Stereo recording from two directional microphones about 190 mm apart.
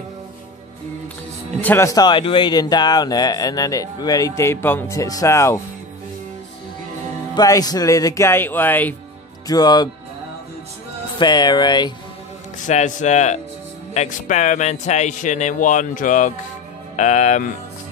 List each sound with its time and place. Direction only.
1.6 s speech: 10° left (ahead or behind)
7.3 s speech: 20° left (ahead or behind)
9.5 s speech: 20° left (ahead or behind)
11.1 s speech: 20° left (ahead or behind)
12.6 s a man's voice: 40° left (ahead or behind)